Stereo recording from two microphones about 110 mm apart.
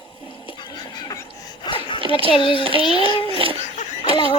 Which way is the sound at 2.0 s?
55° right (ahead or behind).